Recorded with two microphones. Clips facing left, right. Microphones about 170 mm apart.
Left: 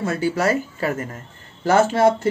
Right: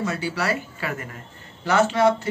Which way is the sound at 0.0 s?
50° left (ahead or behind).